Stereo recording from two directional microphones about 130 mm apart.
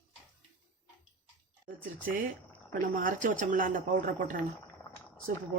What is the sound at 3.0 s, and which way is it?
Speech, 90° right.